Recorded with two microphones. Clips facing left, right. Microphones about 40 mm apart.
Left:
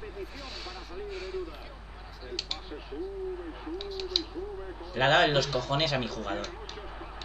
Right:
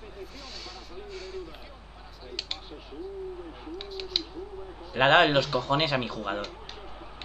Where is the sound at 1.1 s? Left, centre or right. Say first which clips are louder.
Left 2 dB; left.